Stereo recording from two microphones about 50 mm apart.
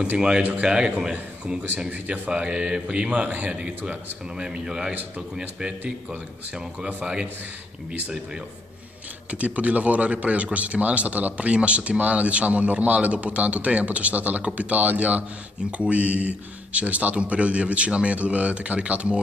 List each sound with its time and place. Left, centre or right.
0.4 s a man's voice: right
0.7 s a man's voice: centre
9.3 s a man's voice: right